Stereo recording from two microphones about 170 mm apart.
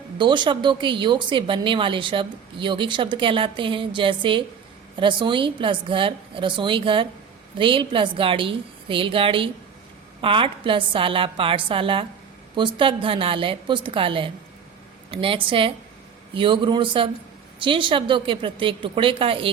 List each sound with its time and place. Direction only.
0.2 s a woman's voice: 25° right (ahead or behind)